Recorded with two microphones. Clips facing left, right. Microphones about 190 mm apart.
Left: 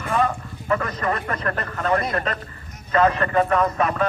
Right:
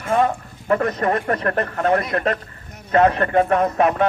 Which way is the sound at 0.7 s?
55° right (ahead or behind).